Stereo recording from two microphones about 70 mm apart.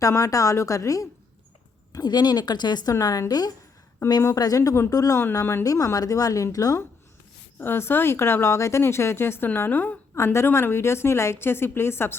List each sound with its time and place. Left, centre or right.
0.0 s a woman's voice: left
1.9 s a woman's voice: left
3.0 s a woman's voice: left
4.0 s a woman's voice: left
7.6 s a woman's voice: left
9.6 s a woman's voice: left
10.2 s a woman's voice: left